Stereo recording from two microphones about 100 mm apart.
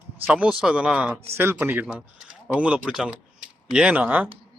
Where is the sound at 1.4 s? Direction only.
20° right (ahead or behind).